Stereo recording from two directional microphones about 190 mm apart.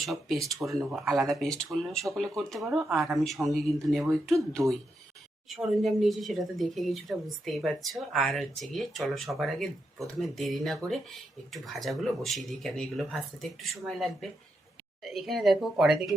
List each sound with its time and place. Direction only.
0.0 s speech: centre (ahead or behind)